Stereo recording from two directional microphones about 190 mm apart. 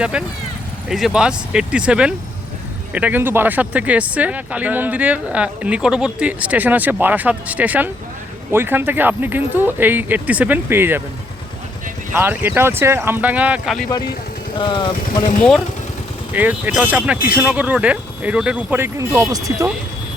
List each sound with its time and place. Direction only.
0.0 s speech: 5° right (ahead or behind)
12.1 s speech: 10° right (ahead or behind)
14.6 s speech: 25° left (ahead or behind)
16.3 s speech: 10° right (ahead or behind)